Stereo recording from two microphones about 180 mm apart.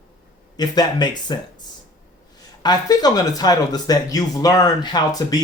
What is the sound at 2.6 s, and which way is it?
A man's voice, 20° left (ahead or behind).